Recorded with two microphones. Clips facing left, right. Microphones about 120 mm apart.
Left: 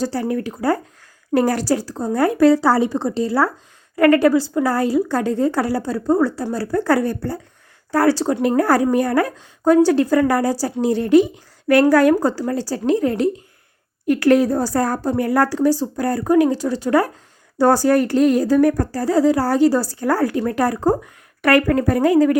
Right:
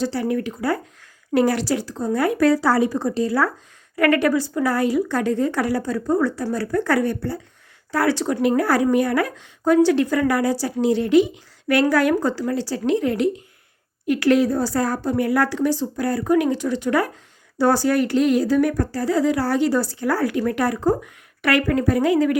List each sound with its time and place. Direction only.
0.0 s a woman's voice: 40° left (ahead or behind)